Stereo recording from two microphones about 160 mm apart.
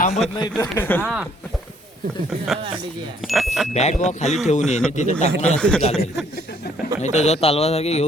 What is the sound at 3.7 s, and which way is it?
A man's voice, 45° left (ahead or behind).